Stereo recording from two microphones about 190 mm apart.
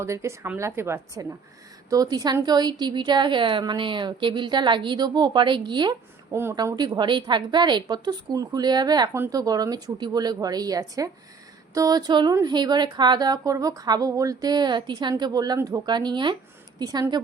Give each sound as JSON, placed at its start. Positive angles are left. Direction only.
{"t": 0.0, "sound": "a woman's voice", "side_deg": -15}